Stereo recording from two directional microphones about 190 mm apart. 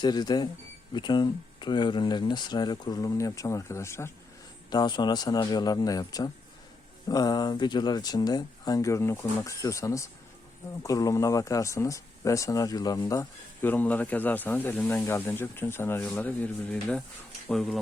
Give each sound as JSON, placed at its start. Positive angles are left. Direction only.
{"t": 0.0, "sound": "speech", "side_deg": 20}